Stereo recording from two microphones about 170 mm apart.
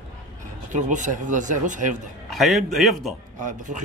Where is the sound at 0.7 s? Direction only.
45° right (ahead or behind).